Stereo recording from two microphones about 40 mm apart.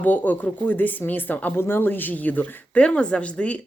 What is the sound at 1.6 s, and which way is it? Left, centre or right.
Speech, left.